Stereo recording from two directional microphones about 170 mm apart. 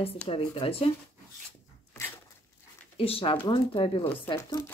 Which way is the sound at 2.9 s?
35° left (ahead or behind).